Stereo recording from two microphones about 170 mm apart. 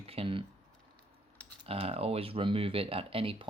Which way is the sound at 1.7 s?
35° right (ahead or behind).